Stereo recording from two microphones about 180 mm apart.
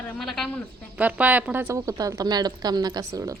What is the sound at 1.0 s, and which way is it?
A woman's voice, 10° right (ahead or behind).